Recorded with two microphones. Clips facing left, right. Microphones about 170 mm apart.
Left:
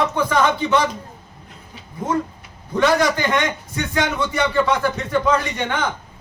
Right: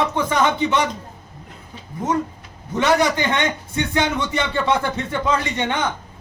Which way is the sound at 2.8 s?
20° right (ahead or behind).